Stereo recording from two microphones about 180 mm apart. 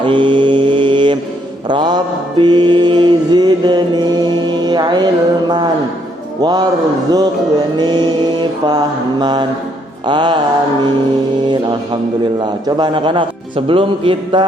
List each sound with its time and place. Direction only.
0.0 s mantra: 25° right (ahead or behind)
2.4 s music: 25° right (ahead or behind)
4.4 s mantra: 25° right (ahead or behind)
11.5 s mantra: 25° right (ahead or behind)